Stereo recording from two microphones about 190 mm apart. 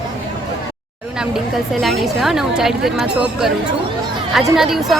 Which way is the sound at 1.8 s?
Centre (ahead or behind).